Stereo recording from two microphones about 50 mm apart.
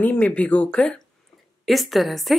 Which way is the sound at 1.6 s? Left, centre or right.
Centre.